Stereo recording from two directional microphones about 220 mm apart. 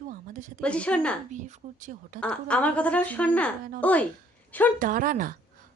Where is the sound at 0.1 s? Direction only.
35° right (ahead or behind).